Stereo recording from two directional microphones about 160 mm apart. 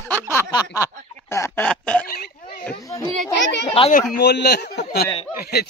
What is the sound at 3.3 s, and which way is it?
Speech, 90° left.